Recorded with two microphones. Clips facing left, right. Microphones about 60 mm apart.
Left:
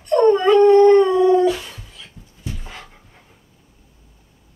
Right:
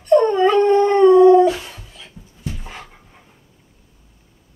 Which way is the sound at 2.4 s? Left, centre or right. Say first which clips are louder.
Right 2 dB; centre.